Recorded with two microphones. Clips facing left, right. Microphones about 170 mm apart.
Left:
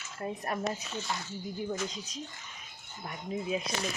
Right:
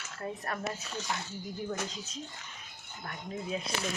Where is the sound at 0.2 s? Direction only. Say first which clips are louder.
Left 2 dB; 20° left (ahead or behind).